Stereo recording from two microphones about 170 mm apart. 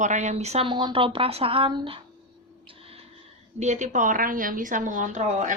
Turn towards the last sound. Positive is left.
turn(degrees=-45)  # may be behind; listen again after turning